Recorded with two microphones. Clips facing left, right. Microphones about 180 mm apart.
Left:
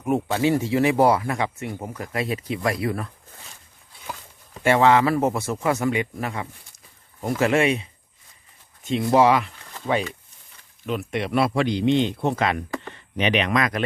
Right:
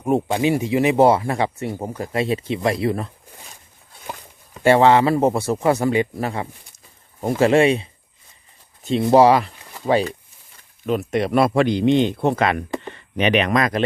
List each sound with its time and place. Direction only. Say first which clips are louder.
0.3 s speech: right 2 dB; 15° right (ahead or behind)
4.6 s speech: right 3 dB; 30° right (ahead or behind)